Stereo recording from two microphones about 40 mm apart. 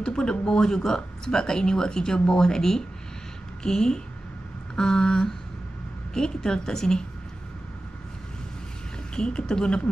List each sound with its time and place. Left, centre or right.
0.0 s speech: centre
9.1 s a woman's voice: left